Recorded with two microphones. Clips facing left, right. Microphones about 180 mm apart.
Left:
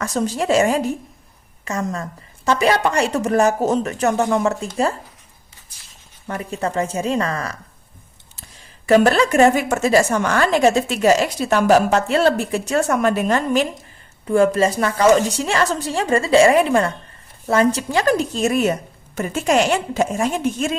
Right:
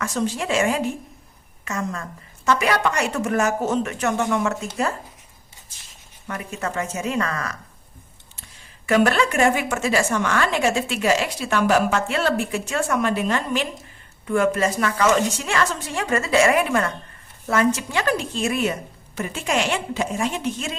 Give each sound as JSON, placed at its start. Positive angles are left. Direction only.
{"t": 0.0, "sound": "a woman's voice", "side_deg": 40}
{"t": 6.2, "sound": "a woman's voice", "side_deg": 30}
{"t": 8.9, "sound": "a woman's voice", "side_deg": 35}